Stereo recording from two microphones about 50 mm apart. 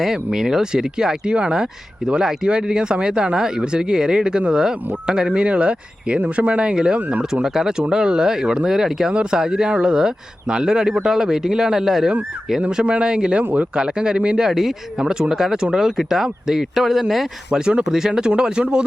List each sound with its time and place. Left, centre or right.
0.0 s speech: centre
12.7 s speech: right
13.4 s speech: right
13.7 s speech: centre
17.5 s speech: centre